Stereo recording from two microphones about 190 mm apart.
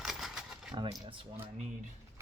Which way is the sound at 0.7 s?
25° right (ahead or behind).